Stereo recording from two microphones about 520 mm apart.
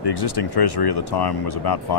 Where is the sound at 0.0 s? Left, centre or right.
Left.